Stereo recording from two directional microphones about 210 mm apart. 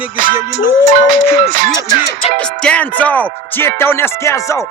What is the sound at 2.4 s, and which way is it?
Music, 5° left (ahead or behind).